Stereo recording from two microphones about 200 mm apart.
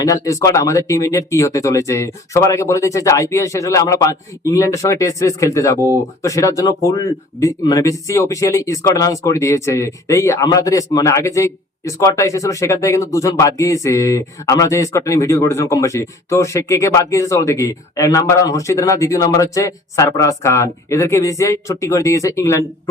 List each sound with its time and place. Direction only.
0.0 s speech: 15° left (ahead or behind)